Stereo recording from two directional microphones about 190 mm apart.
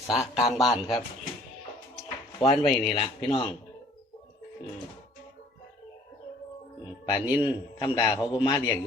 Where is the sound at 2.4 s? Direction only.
30° left (ahead or behind).